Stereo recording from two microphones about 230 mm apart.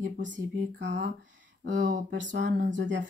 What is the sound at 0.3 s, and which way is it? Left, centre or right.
Speech, right.